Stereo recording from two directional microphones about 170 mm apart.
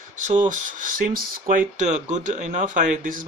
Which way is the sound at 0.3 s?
50° right (ahead or behind).